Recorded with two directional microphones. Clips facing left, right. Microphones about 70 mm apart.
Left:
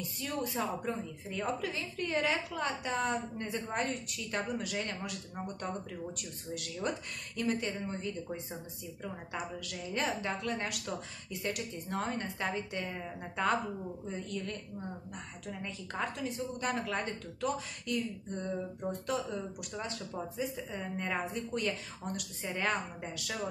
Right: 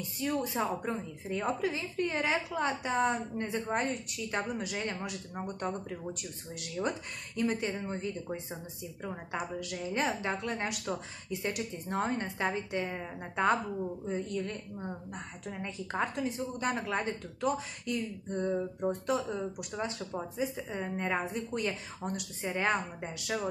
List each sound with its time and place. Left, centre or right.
0.2 s a woman's voice: centre